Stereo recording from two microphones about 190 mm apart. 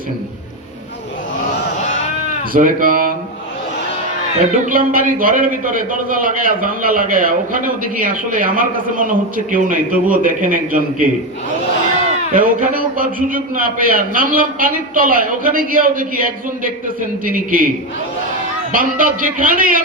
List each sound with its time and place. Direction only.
2.5 s speech: 45° right (ahead or behind)
4.6 s a man's voice: 45° right (ahead or behind)
12.3 s a man's voice: 45° right (ahead or behind)
18.7 s a man's voice: 45° right (ahead or behind)